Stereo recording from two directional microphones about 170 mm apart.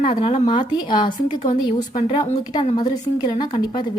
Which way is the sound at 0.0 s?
35° left (ahead or behind).